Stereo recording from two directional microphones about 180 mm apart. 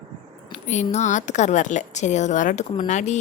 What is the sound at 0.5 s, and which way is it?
A woman's voice, 40° left (ahead or behind).